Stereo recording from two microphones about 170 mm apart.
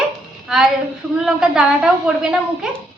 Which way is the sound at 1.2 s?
5° right (ahead or behind).